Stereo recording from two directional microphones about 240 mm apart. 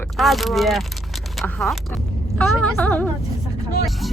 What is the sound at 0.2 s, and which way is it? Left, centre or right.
Speech, centre.